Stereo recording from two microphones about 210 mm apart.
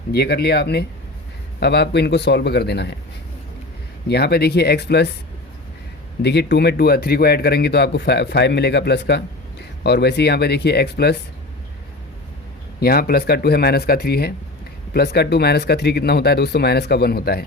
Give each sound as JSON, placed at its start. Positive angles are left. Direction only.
{"t": 0.1, "sound": "speech", "side_deg": 50}
{"t": 4.1, "sound": "speech", "side_deg": 50}
{"t": 6.2, "sound": "speech", "side_deg": 50}
{"t": 12.8, "sound": "speech", "side_deg": 45}